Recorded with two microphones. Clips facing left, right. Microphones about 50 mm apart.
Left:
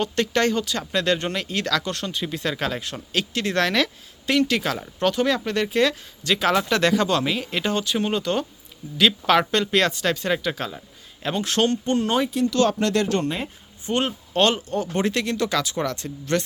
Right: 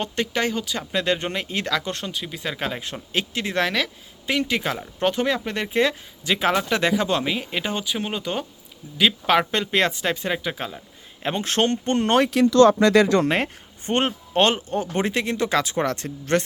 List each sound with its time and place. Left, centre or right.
0.2 s speech: centre
2.1 s speech: centre
11.2 s speech: right
13.2 s speech: right
13.8 s speech: right